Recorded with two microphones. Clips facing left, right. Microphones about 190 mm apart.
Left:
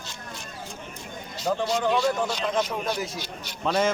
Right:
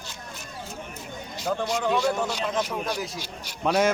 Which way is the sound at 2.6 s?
5° right (ahead or behind).